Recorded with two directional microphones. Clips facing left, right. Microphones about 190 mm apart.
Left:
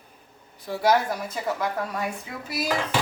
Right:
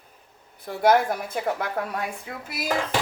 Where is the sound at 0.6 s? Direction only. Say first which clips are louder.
Right 2 dB; 55° right (ahead or behind).